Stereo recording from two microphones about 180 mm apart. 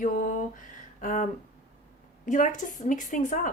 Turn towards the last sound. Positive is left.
turn(degrees=45)  # may be behind; listen again after turning